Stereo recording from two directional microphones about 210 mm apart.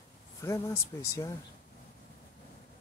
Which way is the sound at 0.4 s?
15° left (ahead or behind).